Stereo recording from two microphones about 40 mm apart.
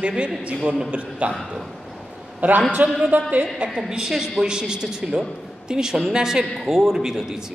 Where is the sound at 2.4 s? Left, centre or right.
Right.